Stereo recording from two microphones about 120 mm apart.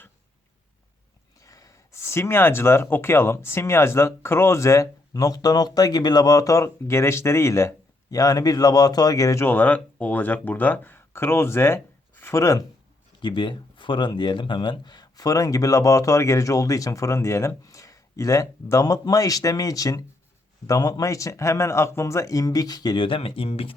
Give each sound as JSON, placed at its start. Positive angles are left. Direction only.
{"t": 1.4, "sound": "speech", "side_deg": 30}
{"t": 13.1, "sound": "speech", "side_deg": 40}